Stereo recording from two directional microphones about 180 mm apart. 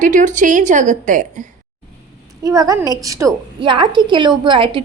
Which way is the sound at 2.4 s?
20° right (ahead or behind).